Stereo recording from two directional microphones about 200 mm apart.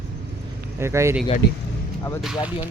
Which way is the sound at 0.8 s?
15° right (ahead or behind).